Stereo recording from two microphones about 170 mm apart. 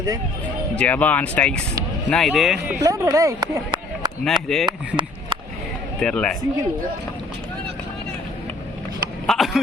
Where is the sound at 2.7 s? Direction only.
15° right (ahead or behind).